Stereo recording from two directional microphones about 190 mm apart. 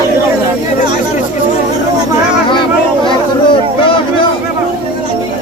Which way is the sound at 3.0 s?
25° left (ahead or behind).